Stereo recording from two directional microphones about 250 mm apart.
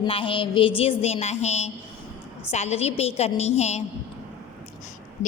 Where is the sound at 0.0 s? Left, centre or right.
Centre.